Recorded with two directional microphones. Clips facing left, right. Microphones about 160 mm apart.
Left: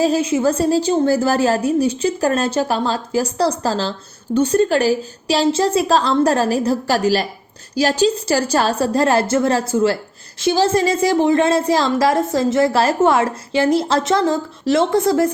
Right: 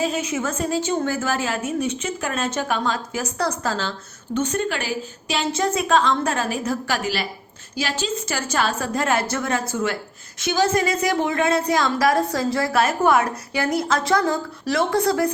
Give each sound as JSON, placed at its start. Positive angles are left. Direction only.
{"t": 0.0, "sound": "a woman's voice", "side_deg": 35}